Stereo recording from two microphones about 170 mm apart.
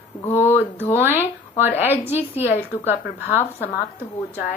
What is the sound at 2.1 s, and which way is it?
Speech, 40° left (ahead or behind).